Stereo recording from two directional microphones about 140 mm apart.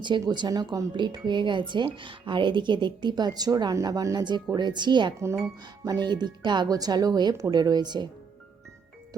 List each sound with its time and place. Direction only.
0.0 s speech: 35° right (ahead or behind)